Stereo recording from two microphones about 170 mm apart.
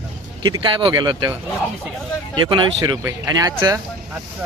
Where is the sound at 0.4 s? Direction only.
25° right (ahead or behind).